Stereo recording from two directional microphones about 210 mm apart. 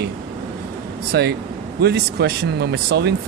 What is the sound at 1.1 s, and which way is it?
Speech, 50° right (ahead or behind).